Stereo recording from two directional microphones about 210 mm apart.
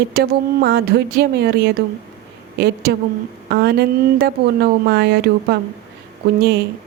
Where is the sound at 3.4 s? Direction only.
50° right (ahead or behind).